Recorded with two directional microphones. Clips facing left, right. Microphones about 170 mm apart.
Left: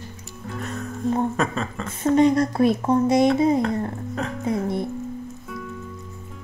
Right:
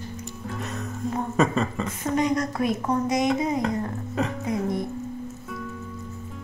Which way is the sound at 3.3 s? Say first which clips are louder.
Left 6 dB; 30° left (ahead or behind).